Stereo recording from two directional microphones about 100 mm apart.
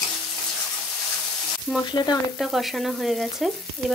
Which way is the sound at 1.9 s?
45° left (ahead or behind).